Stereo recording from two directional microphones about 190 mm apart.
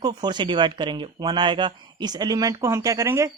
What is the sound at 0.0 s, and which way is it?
Speech, 20° right (ahead or behind).